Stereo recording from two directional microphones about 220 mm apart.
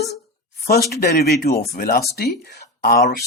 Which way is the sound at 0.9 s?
45° left (ahead or behind).